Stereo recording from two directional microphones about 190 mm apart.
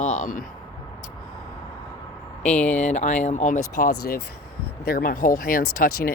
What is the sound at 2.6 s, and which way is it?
Speech, 10° left (ahead or behind).